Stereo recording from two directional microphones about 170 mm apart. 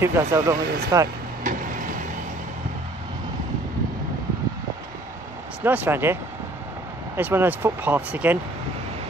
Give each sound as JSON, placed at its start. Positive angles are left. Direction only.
{"t": 0.0, "sound": "speech", "side_deg": -15}
{"t": 1.4, "sound": "a sound", "side_deg": -50}
{"t": 5.6, "sound": "speech", "side_deg": -10}
{"t": 7.2, "sound": "speech", "side_deg": -10}